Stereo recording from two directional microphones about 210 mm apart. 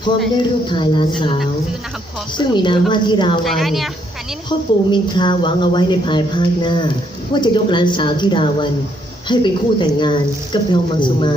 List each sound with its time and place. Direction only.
0.7 s speech: 20° left (ahead or behind)
2.4 s speech: 20° left (ahead or behind)
3.4 s a woman's voice: centre (ahead or behind)
4.4 s speech: 20° left (ahead or behind)